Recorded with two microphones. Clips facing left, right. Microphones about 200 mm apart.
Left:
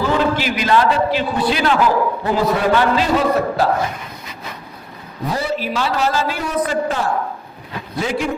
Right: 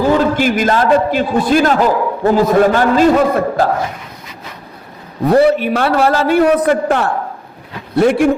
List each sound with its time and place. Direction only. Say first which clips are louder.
0.3 s a man's voice: right 4 dB; 50° right (ahead or behind)
5.3 s a man's voice: right 11 dB; 60° right (ahead or behind)